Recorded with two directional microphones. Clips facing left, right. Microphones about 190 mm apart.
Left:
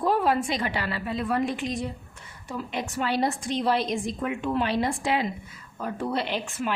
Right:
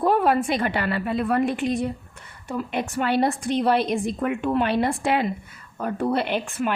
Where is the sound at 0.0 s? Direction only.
60° right (ahead or behind).